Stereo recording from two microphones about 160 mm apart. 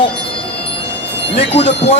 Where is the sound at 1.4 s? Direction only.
40° left (ahead or behind).